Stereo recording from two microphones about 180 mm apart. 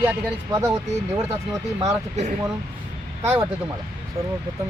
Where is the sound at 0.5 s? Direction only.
15° right (ahead or behind).